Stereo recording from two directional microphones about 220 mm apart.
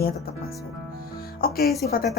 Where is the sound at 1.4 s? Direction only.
40° left (ahead or behind).